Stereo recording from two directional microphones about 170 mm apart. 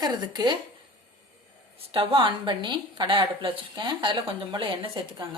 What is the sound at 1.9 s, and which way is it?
A woman's voice, 30° right (ahead or behind).